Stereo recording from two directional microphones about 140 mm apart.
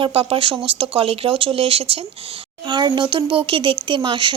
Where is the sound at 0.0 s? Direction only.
40° right (ahead or behind).